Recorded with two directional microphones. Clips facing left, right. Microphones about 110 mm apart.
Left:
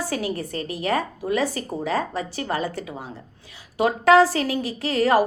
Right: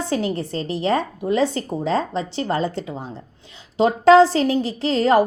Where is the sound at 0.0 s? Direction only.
25° right (ahead or behind).